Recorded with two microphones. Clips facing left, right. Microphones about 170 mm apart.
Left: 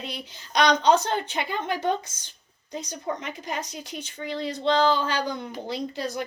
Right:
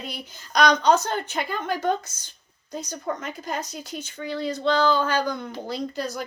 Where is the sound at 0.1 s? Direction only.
20° left (ahead or behind).